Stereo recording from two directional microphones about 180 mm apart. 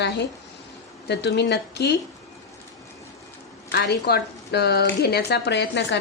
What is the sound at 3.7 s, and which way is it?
A woman's voice, 65° left (ahead or behind).